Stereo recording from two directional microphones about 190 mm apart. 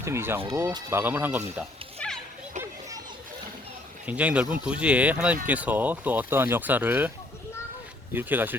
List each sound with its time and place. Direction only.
0.0 s speech: 15° right (ahead or behind)
2.0 s children playing: 5° left (ahead or behind)
4.0 s speech: 5° right (ahead or behind)
8.1 s speech: 10° right (ahead or behind)